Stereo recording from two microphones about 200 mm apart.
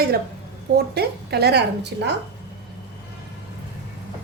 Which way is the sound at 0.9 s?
55° right (ahead or behind).